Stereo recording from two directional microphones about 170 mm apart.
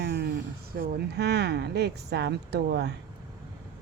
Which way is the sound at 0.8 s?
70° right (ahead or behind).